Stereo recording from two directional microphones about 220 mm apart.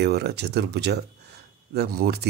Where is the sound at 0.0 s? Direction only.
50° right (ahead or behind).